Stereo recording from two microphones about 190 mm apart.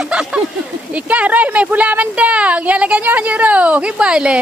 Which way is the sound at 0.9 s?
5° right (ahead or behind).